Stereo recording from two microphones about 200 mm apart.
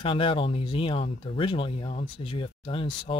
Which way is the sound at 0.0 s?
25° left (ahead or behind).